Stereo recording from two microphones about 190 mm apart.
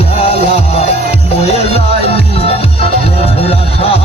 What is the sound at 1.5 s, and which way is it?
Music, 30° left (ahead or behind).